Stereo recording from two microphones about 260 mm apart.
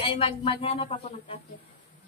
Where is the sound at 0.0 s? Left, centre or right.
Left.